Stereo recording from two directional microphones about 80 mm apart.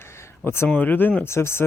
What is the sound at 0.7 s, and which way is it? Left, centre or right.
Speech, centre.